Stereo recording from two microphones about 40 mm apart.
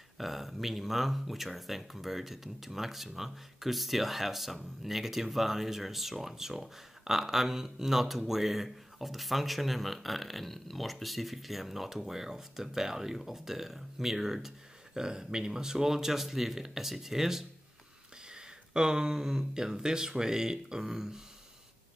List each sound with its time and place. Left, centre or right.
0.2 s speech: centre